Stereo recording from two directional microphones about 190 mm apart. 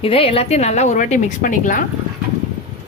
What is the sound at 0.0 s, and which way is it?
A woman's voice, 30° left (ahead or behind).